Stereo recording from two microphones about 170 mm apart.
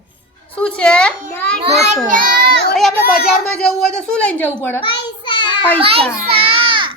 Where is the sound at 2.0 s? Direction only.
55° right (ahead or behind).